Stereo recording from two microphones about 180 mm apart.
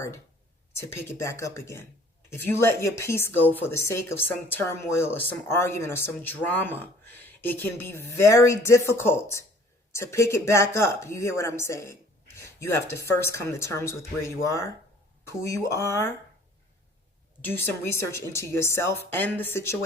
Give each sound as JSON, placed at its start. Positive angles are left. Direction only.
{"t": 0.9, "sound": "speech", "side_deg": 15}
{"t": 17.4, "sound": "speech", "side_deg": 10}